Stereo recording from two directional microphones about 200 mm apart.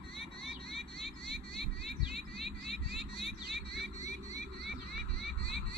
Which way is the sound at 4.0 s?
35° left (ahead or behind).